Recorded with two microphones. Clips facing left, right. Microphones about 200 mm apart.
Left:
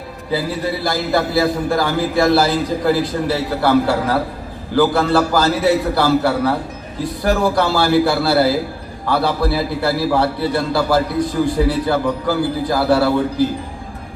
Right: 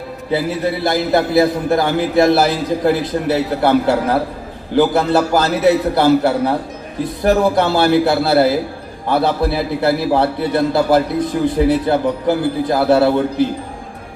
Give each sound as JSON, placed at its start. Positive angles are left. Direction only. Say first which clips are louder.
{"t": 0.3, "sound": "a man's voice", "louder": "right 2 dB", "side_deg": -25}